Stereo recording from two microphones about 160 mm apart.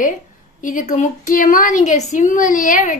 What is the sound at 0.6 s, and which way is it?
A woman's voice, 55° left (ahead or behind).